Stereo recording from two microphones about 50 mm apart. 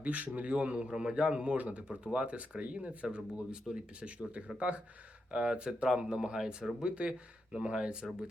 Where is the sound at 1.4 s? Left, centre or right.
Right.